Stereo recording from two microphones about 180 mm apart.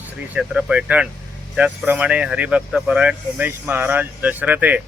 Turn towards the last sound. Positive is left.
turn(degrees=-10)  # may be behind; listen again after turning